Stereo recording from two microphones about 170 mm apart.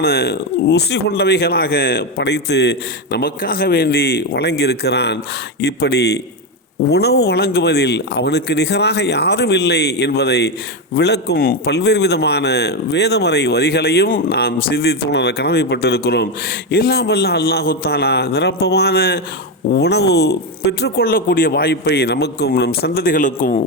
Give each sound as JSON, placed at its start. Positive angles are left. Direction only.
{"t": 0.0, "sound": "a man's voice", "side_deg": 65}